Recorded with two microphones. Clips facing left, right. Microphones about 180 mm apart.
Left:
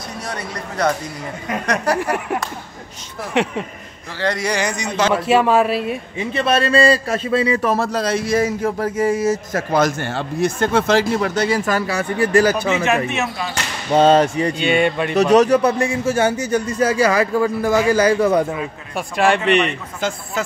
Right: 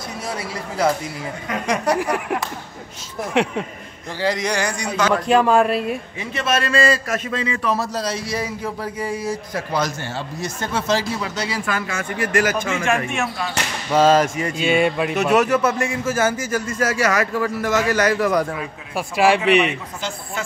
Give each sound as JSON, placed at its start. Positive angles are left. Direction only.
{"t": 0.3, "sound": "a man's voice", "side_deg": -5}
{"t": 4.6, "sound": "a man's voice", "side_deg": -10}
{"t": 5.1, "sound": "a man's voice", "side_deg": 5}
{"t": 6.1, "sound": "a man's voice", "side_deg": 30}
{"t": 12.8, "sound": "a man's voice", "side_deg": 5}
{"t": 13.9, "sound": "a man's voice", "side_deg": 35}
{"t": 14.5, "sound": "a man's voice", "side_deg": 0}
{"t": 15.3, "sound": "a man's voice", "side_deg": 35}
{"t": 18.5, "sound": "a man's voice", "side_deg": 0}